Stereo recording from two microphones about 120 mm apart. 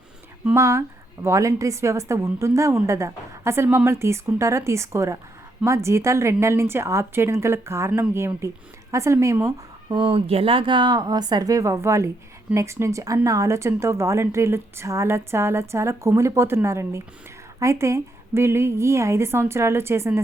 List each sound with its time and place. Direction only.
0.5 s a woman's voice: 20° right (ahead or behind)
9.9 s a woman's voice: 45° right (ahead or behind); by 20.2 s 20° right (ahead or behind)